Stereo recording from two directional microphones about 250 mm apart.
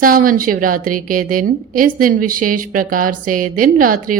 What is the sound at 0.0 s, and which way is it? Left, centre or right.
A woman's voice, right.